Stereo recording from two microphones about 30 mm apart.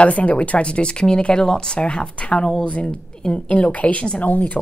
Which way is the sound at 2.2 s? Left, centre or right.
Left.